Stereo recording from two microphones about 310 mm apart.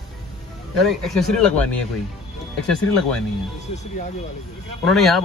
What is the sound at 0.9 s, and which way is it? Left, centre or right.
Speech, centre.